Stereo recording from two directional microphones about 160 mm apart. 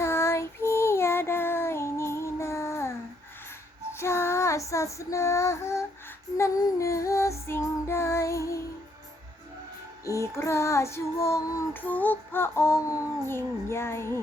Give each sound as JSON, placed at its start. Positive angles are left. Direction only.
{"t": 0.0, "sound": "child singing", "side_deg": 15}
{"t": 3.9, "sound": "child singing", "side_deg": 15}
{"t": 6.3, "sound": "female singing", "side_deg": 20}
{"t": 10.1, "sound": "child singing", "side_deg": 20}